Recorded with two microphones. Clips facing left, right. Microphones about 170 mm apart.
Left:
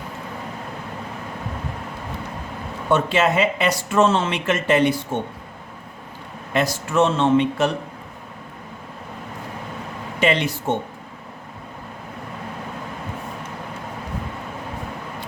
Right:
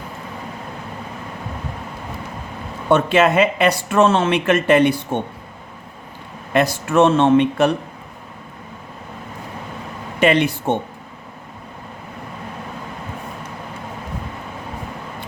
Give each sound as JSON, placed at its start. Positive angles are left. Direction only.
{"t": 2.9, "sound": "speech", "side_deg": -55}
{"t": 6.5, "sound": "speech", "side_deg": -60}
{"t": 10.2, "sound": "speech", "side_deg": -55}